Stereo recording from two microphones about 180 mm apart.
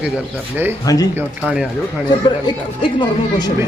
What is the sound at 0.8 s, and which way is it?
Speech, 20° left (ahead or behind).